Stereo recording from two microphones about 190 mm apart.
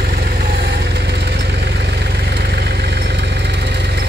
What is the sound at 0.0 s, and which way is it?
Vehicle, 55° right (ahead or behind).